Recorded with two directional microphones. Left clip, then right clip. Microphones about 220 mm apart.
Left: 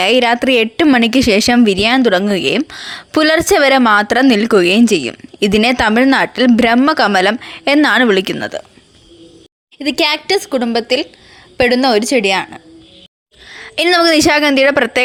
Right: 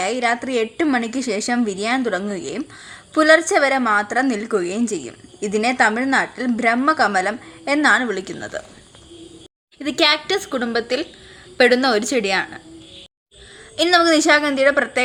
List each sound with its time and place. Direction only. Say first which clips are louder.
0.0 s speech: left 9 dB; 40° left (ahead or behind)
9.7 s a woman's voice: left 2 dB; 25° left (ahead or behind)
13.5 s speech: left 3 dB; 40° left (ahead or behind)